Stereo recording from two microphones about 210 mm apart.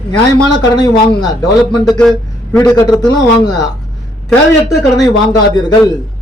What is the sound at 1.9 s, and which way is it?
Speech, 5° left (ahead or behind).